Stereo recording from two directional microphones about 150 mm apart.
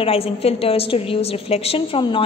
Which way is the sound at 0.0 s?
40° left (ahead or behind).